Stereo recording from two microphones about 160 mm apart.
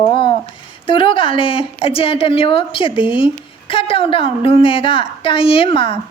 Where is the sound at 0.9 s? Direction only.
30° left (ahead or behind).